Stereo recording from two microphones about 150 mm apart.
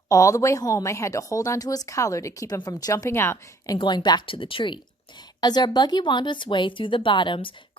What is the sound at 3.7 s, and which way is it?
A woman's voice, 30° left (ahead or behind).